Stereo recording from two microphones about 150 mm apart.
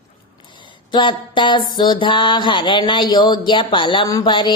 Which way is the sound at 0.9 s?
30° left (ahead or behind).